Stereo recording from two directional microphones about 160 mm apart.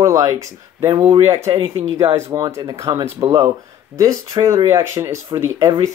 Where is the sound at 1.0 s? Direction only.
35° right (ahead or behind).